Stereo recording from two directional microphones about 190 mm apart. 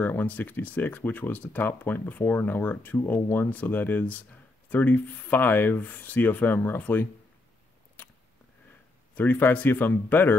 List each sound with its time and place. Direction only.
0.0 s speech: 10° left (ahead or behind)
9.1 s speech: 10° left (ahead or behind)